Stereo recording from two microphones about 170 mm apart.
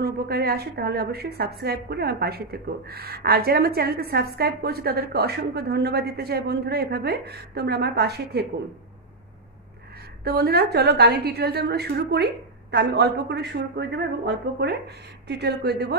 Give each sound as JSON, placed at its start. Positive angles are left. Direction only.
{"t": 0.0, "sound": "a woman's voice", "side_deg": -70}
{"t": 10.2, "sound": "a woman's voice", "side_deg": -65}